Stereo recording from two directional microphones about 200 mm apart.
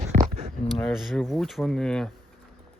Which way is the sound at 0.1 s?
35° right (ahead or behind).